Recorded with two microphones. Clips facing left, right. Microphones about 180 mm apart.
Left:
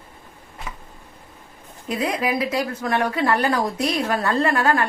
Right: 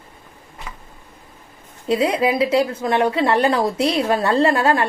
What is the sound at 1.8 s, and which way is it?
Speech, 30° right (ahead or behind).